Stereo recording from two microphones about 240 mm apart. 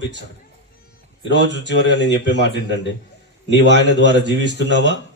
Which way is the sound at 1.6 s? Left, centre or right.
Left.